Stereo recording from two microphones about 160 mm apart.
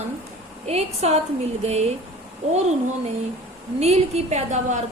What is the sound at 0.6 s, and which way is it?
A woman's voice, 40° right (ahead or behind).